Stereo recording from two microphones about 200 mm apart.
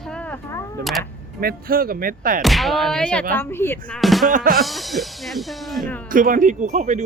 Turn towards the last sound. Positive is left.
turn(degrees=-35)  # may be behind; listen again after turning